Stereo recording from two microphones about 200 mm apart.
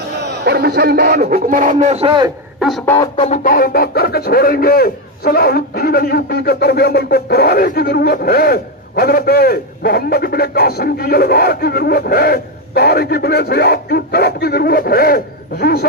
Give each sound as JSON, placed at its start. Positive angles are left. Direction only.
{"t": 0.2, "sound": "a man's voice", "side_deg": -55}
{"t": 2.8, "sound": "music", "side_deg": 10}
{"t": 3.4, "sound": "a man's voice", "side_deg": 45}